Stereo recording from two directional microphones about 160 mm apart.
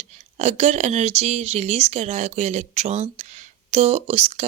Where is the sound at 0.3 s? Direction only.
45° right (ahead or behind).